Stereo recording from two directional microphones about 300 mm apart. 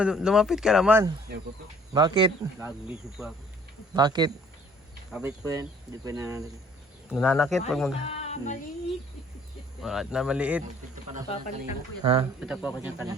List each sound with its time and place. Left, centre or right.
0.0 s speech: centre
3.9 s speech: centre
8.0 s music: left
9.8 s speech: centre
12.0 s speech: centre
12.4 s speech: centre